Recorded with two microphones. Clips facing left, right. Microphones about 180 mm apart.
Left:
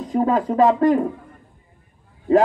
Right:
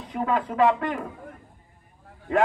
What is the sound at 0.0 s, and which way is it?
Speech, 40° left (ahead or behind).